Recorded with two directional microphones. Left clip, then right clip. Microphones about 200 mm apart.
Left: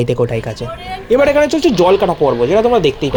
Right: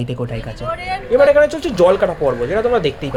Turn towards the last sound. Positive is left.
turn(degrees=25)  # may be behind; listen again after turning